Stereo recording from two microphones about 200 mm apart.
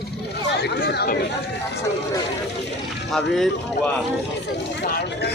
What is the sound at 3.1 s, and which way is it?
Speech, centre (ahead or behind).